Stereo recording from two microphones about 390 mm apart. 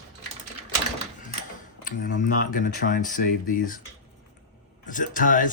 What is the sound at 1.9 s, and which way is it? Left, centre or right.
Speech, centre.